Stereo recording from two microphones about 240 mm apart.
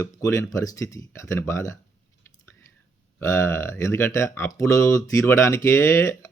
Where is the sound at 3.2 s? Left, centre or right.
Centre.